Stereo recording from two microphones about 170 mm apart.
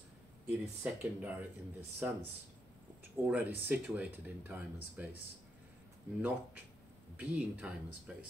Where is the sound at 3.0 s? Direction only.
10° right (ahead or behind).